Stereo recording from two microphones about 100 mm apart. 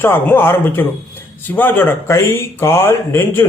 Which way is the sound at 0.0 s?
20° left (ahead or behind).